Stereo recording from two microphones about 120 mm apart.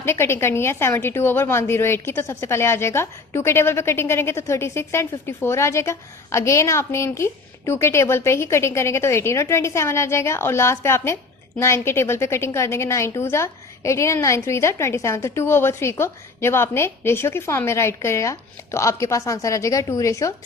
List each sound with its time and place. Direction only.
0.0 s a woman's voice: 20° left (ahead or behind)